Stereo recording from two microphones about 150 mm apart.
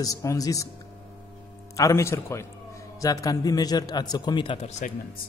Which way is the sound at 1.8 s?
20° left (ahead or behind).